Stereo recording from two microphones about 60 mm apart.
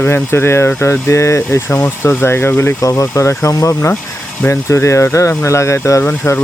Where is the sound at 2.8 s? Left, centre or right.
Left.